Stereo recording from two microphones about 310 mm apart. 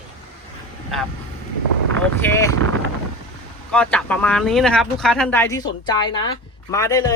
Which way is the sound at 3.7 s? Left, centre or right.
Centre.